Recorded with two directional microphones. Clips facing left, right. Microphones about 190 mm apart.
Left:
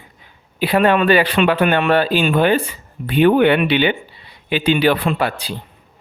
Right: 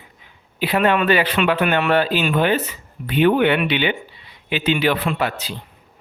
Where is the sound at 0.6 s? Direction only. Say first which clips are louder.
Left 3 dB; 35° left (ahead or behind).